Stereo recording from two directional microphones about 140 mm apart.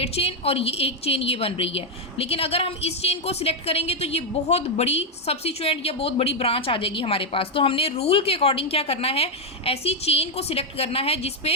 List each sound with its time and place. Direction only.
0.0 s a woman's voice: 45° left (ahead or behind)